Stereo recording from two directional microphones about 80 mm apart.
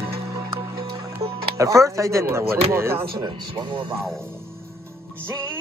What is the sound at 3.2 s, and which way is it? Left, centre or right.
Speech, right.